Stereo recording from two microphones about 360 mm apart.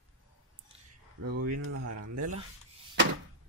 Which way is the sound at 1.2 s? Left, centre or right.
Right.